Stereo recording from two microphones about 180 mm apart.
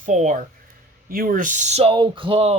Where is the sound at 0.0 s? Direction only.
45° right (ahead or behind).